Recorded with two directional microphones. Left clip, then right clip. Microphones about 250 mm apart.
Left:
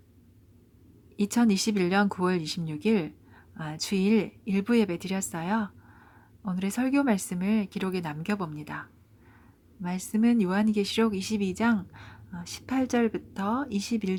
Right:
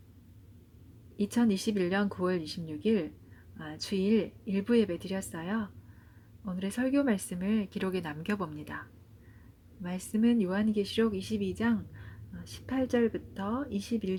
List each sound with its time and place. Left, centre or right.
1.1 s speech: centre